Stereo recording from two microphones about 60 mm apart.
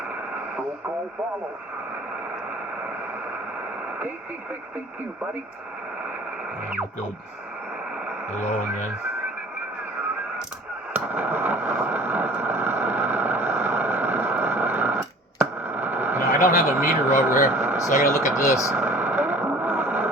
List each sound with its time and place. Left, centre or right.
10.9 s vehicle: right
16.7 s speech: right
17.7 s speech: left
18.7 s vehicle: right